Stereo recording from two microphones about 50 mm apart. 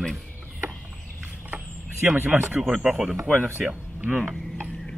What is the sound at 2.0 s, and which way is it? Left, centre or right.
Speech, right.